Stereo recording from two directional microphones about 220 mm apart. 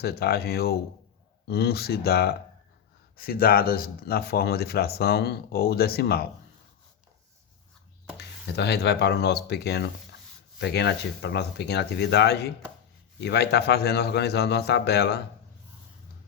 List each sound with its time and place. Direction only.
0.0 s speech: 45° left (ahead or behind)
8.2 s speech: 50° left (ahead or behind)